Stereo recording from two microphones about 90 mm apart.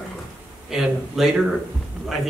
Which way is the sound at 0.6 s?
5° right (ahead or behind).